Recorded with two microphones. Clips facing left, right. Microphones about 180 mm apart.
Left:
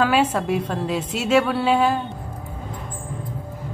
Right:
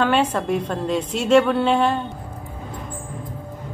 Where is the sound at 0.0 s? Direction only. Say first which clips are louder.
Even; 5° left (ahead or behind).